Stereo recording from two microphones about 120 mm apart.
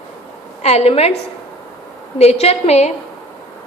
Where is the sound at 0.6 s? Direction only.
60° left (ahead or behind).